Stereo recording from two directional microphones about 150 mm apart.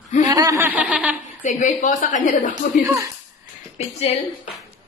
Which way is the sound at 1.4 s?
60° left (ahead or behind).